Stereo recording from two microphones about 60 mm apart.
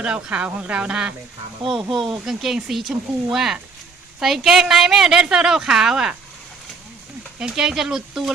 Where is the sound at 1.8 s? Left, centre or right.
Centre.